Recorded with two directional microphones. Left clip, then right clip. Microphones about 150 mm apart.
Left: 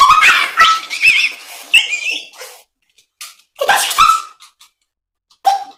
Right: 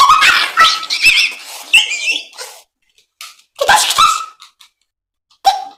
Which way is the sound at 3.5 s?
45° right (ahead or behind).